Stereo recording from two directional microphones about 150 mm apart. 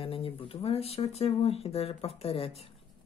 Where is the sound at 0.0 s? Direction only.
40° left (ahead or behind).